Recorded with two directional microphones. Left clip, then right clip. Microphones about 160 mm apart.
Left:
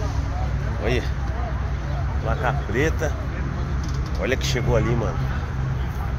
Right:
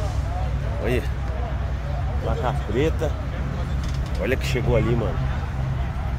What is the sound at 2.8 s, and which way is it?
Speech, 25° right (ahead or behind).